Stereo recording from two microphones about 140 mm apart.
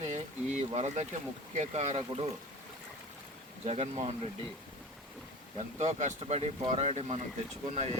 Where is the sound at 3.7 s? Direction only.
50° right (ahead or behind).